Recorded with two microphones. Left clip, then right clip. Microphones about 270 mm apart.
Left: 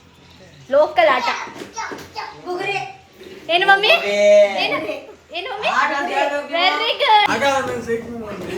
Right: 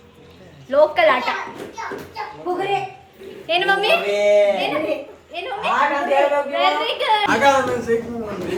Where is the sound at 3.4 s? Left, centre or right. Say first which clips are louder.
Left 4 dB; left.